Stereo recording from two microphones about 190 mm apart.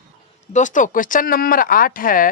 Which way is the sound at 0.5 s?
40° left (ahead or behind).